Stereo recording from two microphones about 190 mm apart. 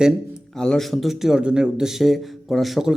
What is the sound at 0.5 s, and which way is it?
Speech, 5° left (ahead or behind).